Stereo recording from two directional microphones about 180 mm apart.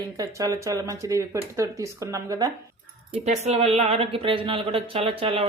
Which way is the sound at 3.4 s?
35° right (ahead or behind).